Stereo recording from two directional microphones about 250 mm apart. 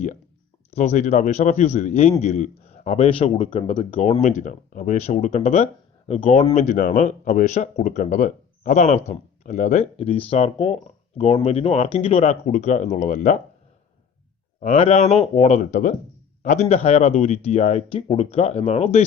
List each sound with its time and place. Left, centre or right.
0.7 s a man's voice: left
14.6 s a man's voice: left